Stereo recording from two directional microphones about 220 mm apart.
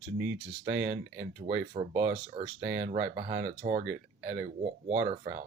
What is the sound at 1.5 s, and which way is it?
Speech, 25° right (ahead or behind).